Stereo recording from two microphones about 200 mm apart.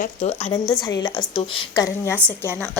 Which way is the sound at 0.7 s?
20° left (ahead or behind).